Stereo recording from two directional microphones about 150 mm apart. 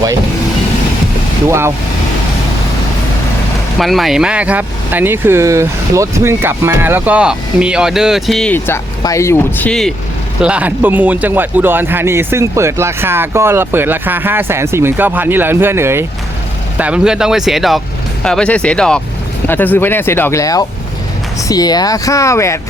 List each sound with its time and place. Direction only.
1.5 s a man's voice: 15° right (ahead or behind)
3.8 s a man's voice: centre (ahead or behind)
8.5 s speech: 15° left (ahead or behind)
10.4 s a man's voice: 10° right (ahead or behind); by 22.5 s 20° left (ahead or behind)